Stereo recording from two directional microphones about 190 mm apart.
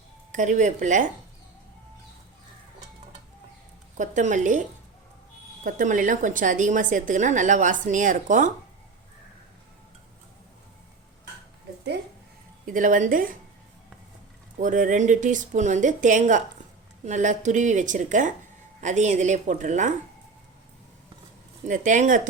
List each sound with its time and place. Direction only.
0.3 s a woman's voice: 40° right (ahead or behind)
3.9 s a woman's voice: 40° right (ahead or behind)
5.6 s a woman's voice: 45° right (ahead or behind)
12.6 s a woman's voice: 45° right (ahead or behind)
14.6 s a woman's voice: 45° right (ahead or behind)
21.7 s a woman's voice: 40° right (ahead or behind)